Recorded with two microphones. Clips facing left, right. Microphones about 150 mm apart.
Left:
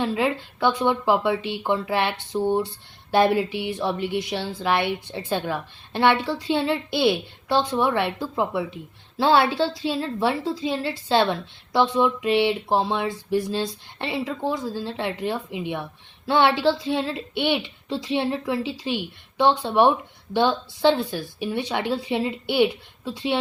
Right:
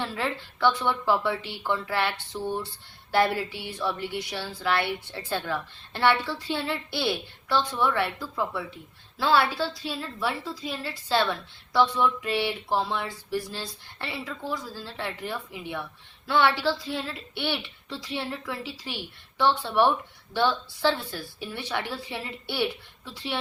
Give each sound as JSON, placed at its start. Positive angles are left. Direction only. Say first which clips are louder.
{"t": 0.0, "sound": "speech", "louder": "left 7 dB", "side_deg": 15}